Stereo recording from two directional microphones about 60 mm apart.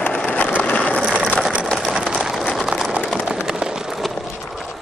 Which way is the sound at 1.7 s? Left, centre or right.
Centre.